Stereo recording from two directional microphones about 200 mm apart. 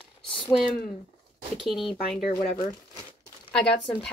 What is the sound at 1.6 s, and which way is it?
Speech, centre (ahead or behind).